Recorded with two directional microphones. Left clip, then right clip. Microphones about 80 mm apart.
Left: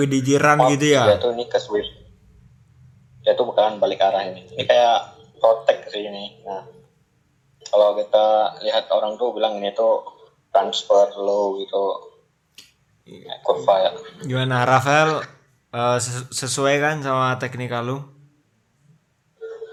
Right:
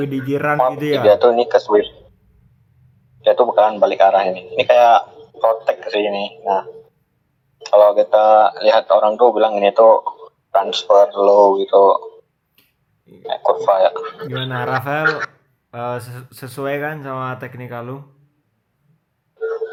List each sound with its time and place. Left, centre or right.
0.0 s speech: centre
1.1 s speech: right
3.2 s speech: right
12.6 s a sound: centre
13.2 s speech: right
14.5 s speech: centre
15.0 s speech: right
15.7 s speech: centre
19.4 s a sound: right